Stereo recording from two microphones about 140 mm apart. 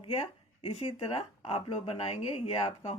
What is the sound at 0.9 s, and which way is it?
Speech, 40° left (ahead or behind).